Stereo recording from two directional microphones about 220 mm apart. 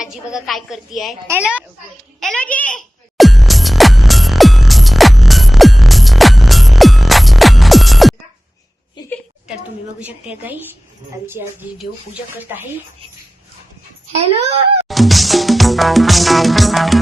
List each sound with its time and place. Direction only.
0.0 s a woman's voice: centre (ahead or behind)
2.2 s music: 5° left (ahead or behind)
10.0 s a woman's voice: 5° right (ahead or behind)
14.1 s a child's voice: 30° right (ahead or behind)
14.8 s music: centre (ahead or behind)